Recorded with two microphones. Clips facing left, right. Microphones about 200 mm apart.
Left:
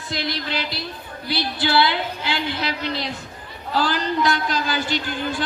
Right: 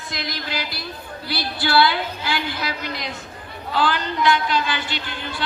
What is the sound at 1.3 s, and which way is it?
A woman's voice, 20° left (ahead or behind).